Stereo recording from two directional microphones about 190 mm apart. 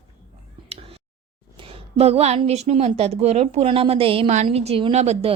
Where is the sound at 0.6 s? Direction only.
30° right (ahead or behind).